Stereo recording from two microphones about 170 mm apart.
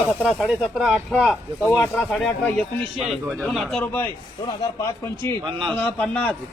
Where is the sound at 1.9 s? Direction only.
5° left (ahead or behind).